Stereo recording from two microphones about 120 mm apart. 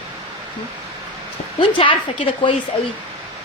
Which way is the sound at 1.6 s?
45° left (ahead or behind).